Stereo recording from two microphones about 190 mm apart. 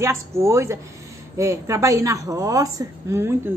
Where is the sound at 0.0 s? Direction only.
15° right (ahead or behind).